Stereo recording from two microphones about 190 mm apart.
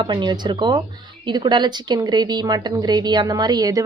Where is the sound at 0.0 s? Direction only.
25° right (ahead or behind).